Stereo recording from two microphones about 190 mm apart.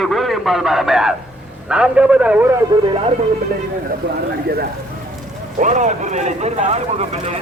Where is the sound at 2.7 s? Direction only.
20° right (ahead or behind).